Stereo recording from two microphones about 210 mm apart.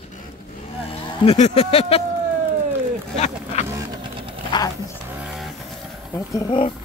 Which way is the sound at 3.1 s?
30° left (ahead or behind).